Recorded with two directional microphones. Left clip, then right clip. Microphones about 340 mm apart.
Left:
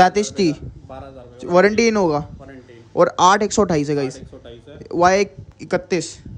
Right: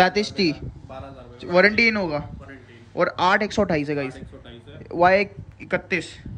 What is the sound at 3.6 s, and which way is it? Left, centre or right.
Speech, right.